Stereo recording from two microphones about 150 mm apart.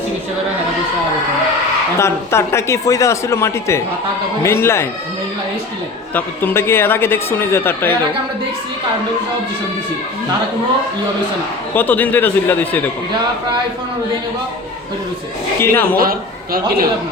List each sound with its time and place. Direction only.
2.0 s speech: 20° left (ahead or behind)
6.1 s speech: 15° left (ahead or behind)
11.7 s speech: 15° left (ahead or behind)
15.6 s speech: 15° left (ahead or behind)
16.0 s a man's voice: 75° right (ahead or behind)